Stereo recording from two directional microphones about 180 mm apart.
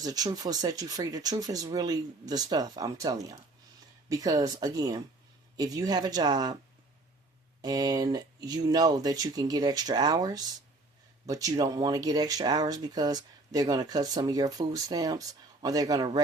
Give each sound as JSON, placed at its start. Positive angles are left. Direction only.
{"t": 0.0, "sound": "speech", "side_deg": -20}
{"t": 7.6, "sound": "speech", "side_deg": -20}